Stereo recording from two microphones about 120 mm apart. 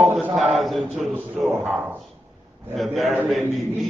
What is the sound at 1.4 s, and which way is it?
Speech, 25° right (ahead or behind).